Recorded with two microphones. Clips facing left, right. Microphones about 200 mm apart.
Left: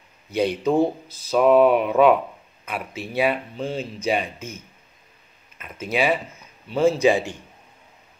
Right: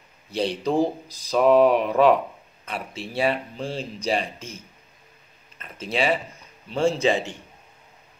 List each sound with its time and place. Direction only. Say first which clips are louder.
0.3 s speech: left 3 dB; 30° right (ahead or behind)
0.7 s speech: left 1 dB; 5° left (ahead or behind)
2.7 s speech: left 2 dB; 30° right (ahead or behind)
3.5 s speech: left 3 dB; centre (ahead or behind)
4.0 s speech: left 2 dB; 30° right (ahead or behind)
5.8 s speech: left 2 dB; 30° right (ahead or behind)
6.7 s a man's voice: left 3 dB; 5° left (ahead or behind)